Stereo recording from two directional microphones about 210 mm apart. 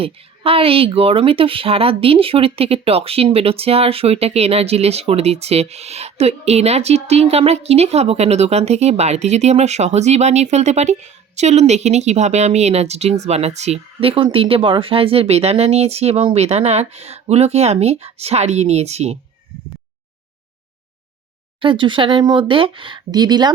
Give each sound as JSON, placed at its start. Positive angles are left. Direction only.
{"t": 0.0, "sound": "speech", "side_deg": -25}
{"t": 21.6, "sound": "speech", "side_deg": -25}